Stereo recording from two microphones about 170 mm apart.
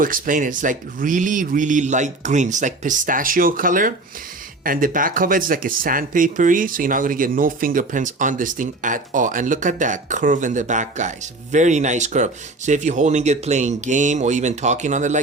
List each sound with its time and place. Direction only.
0.0 s speech: 55° right (ahead or behind)